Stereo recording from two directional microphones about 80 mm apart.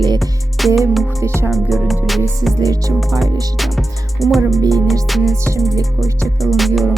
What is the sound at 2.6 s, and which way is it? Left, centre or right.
Music, right.